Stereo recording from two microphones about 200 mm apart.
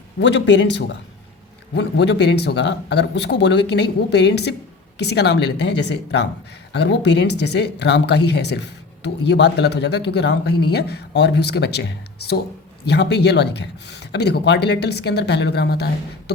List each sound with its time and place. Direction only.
0.2 s speech: 60° left (ahead or behind)